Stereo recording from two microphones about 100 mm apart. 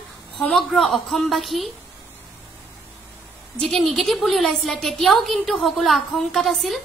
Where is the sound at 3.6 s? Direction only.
5° left (ahead or behind).